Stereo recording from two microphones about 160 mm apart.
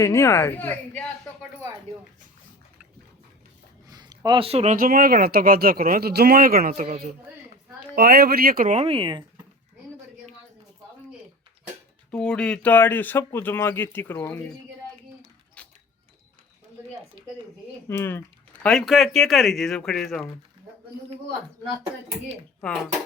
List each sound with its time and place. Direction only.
0.0 s speech: 15° left (ahead or behind)
3.8 s speech: 25° right (ahead or behind); by 7.1 s 55° right (ahead or behind)
7.9 s speech: 70° right (ahead or behind)
8.7 s speech: 35° right (ahead or behind)
12.1 s speech: 5° left (ahead or behind)
15.6 s a sound: 5° left (ahead or behind)
17.8 s speech: 15° left (ahead or behind)
18.6 s speech: 5° left (ahead or behind)
22.6 s speech: 5° left (ahead or behind)